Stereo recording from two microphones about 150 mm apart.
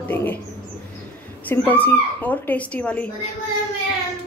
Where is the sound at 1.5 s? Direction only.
10° left (ahead or behind).